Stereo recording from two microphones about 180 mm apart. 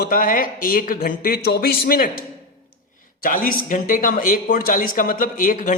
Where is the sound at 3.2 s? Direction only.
50° left (ahead or behind).